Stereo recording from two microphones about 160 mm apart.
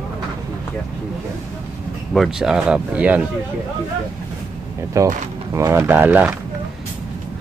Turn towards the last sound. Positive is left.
turn(degrees=-10)  # may be behind; listen again after turning